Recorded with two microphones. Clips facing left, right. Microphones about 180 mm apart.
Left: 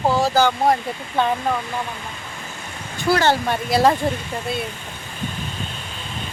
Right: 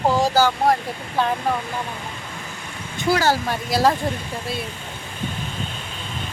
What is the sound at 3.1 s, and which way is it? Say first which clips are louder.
Speech: left 3 dB; 5° right (ahead or behind).